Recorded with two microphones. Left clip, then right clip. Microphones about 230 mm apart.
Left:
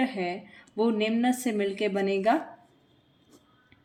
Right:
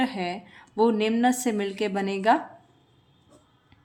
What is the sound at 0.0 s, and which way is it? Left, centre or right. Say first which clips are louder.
A woman's voice: right 1 dB; right.